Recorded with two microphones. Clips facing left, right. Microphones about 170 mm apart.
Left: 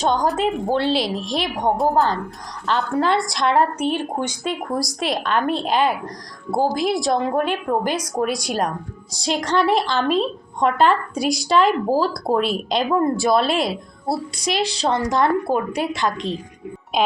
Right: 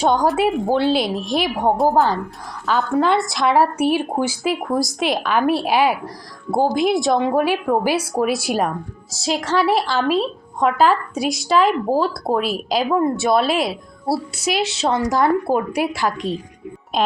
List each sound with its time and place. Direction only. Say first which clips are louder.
0.0 s a woman's voice: right 3 dB; 10° right (ahead or behind)